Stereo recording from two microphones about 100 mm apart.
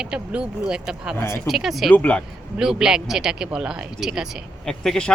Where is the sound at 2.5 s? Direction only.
5° right (ahead or behind).